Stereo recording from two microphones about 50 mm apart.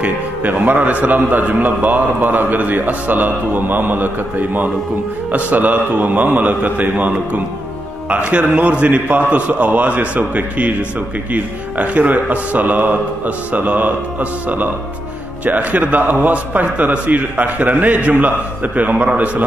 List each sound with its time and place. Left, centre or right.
0.0 s a man's voice: right
8.1 s a man's voice: right
15.4 s a man's voice: right